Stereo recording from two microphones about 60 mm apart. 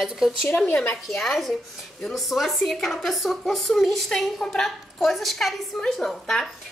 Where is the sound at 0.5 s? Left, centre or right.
Left.